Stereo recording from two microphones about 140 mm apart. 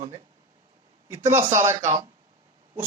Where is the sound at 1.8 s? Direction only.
50° right (ahead or behind).